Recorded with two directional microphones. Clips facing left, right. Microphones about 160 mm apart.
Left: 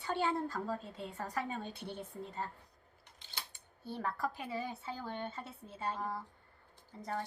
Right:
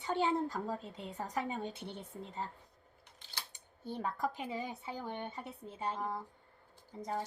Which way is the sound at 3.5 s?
20° right (ahead or behind).